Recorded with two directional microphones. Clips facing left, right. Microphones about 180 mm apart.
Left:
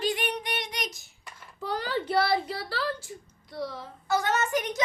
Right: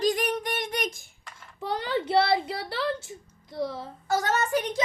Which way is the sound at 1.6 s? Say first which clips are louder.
Right 2 dB; 25° right (ahead or behind).